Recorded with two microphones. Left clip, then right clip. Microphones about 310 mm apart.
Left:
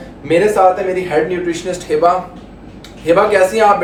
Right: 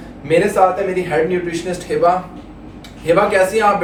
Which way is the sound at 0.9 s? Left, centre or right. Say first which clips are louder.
Left 1 dB; centre.